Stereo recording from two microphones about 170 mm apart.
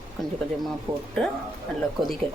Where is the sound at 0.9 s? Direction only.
30° right (ahead or behind).